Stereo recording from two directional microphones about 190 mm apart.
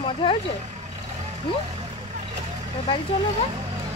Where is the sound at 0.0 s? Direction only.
30° left (ahead or behind).